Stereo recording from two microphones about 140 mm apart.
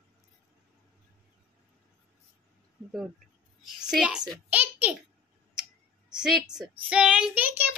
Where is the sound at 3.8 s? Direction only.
5° right (ahead or behind).